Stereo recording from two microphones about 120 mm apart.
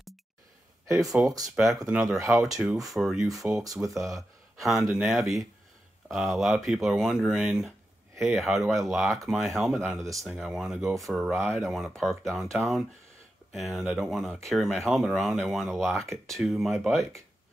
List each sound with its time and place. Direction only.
0.8 s speech: centre (ahead or behind)
1.1 s speech: 30° right (ahead or behind)
1.4 s speech: centre (ahead or behind)
3.6 s speech: 30° right (ahead or behind)
4.6 s speech: centre (ahead or behind)